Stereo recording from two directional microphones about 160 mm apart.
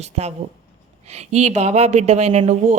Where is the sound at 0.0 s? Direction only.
45° right (ahead or behind).